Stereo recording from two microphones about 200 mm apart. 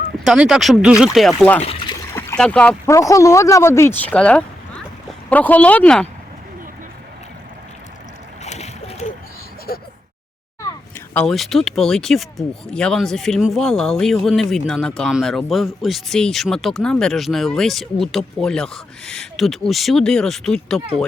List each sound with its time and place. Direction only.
0.3 s speech: 5° right (ahead or behind)
8.4 s splash: 35° left (ahead or behind)
11.1 s speech: 5° left (ahead or behind)